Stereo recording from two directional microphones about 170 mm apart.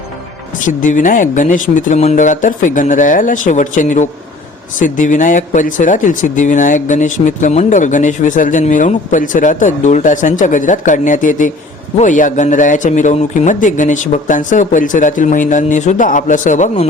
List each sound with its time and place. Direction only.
0.8 s speech: 50° left (ahead or behind)